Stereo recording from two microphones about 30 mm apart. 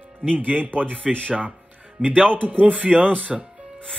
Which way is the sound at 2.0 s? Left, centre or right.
Right.